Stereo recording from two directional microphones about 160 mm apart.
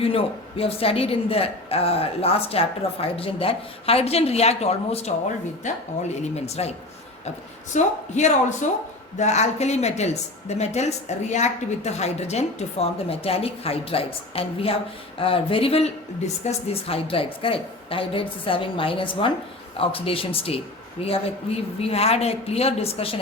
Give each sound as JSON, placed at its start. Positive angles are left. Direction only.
{"t": 0.0, "sound": "a woman's voice", "side_deg": 35}
{"t": 7.7, "sound": "a woman's voice", "side_deg": 50}